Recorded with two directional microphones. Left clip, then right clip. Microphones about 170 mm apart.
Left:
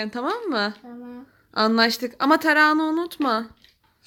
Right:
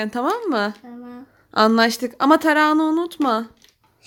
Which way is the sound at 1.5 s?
20° right (ahead or behind).